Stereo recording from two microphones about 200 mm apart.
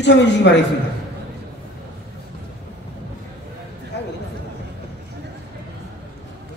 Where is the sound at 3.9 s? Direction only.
60° left (ahead or behind).